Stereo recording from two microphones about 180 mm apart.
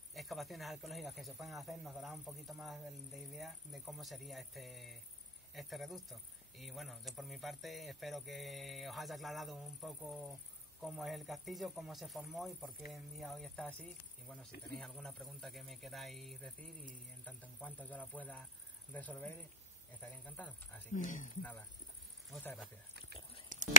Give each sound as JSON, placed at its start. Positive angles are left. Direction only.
{"t": 0.1, "sound": "speech", "side_deg": 0}
{"t": 20.9, "sound": "speech", "side_deg": 45}
{"t": 21.4, "sound": "speech", "side_deg": 10}
{"t": 23.5, "sound": "whispering", "side_deg": -45}